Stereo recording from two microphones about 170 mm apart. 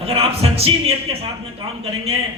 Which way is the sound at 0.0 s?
35° right (ahead or behind).